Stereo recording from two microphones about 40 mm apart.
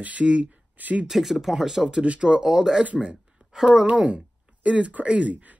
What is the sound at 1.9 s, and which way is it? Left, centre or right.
Speech, right.